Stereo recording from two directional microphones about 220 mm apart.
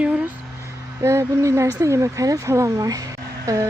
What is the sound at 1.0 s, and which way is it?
Speech, 15° right (ahead or behind).